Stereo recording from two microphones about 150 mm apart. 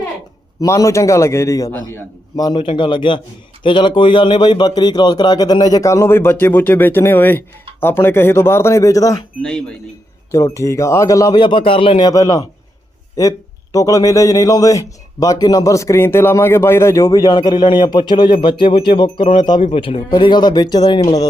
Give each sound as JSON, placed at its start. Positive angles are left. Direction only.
{"t": 0.6, "sound": "a man's voice", "side_deg": 20}
{"t": 9.4, "sound": "speech", "side_deg": 5}
{"t": 10.3, "sound": "a man's voice", "side_deg": 20}
{"t": 13.7, "sound": "a man's voice", "side_deg": 25}